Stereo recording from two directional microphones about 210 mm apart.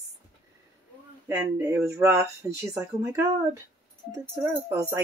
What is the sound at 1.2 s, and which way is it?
A child's voice, 15° right (ahead or behind).